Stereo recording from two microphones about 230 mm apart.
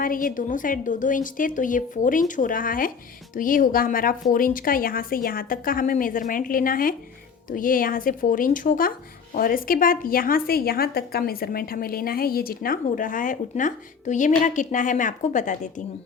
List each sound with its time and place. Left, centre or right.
0.0 s a woman's voice: left